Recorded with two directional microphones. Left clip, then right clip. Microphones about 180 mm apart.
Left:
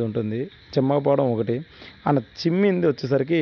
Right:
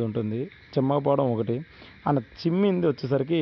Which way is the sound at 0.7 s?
15° left (ahead or behind).